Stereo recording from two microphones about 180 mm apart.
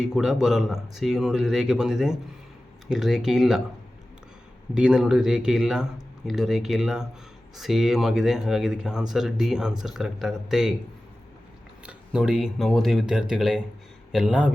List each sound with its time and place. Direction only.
0.0 s speech: 5° right (ahead or behind)
4.7 s speech: 5° right (ahead or behind)
11.9 s speech: 5° right (ahead or behind)